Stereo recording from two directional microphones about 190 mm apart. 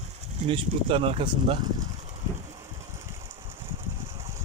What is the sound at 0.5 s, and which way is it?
Speech, 30° right (ahead or behind).